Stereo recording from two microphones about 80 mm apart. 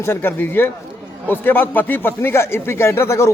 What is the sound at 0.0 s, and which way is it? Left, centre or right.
A man's voice, left.